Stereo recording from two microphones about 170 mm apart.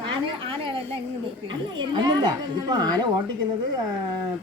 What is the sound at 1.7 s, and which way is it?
A woman's voice, 25° right (ahead or behind).